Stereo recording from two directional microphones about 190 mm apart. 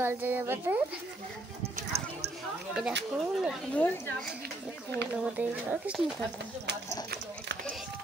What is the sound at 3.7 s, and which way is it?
Speech, 10° left (ahead or behind).